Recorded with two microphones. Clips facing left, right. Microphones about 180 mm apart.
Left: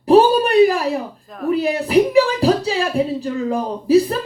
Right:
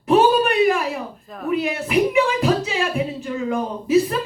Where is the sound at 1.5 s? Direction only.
35° left (ahead or behind).